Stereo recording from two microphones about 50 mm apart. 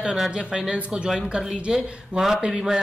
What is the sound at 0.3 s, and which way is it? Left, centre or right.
Speech, centre.